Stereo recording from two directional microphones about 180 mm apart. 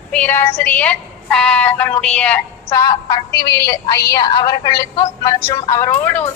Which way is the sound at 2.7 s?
20° left (ahead or behind).